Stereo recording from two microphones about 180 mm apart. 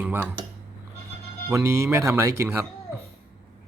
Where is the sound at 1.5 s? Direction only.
15° right (ahead or behind).